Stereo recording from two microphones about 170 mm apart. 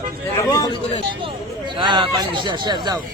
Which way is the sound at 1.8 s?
25° right (ahead or behind).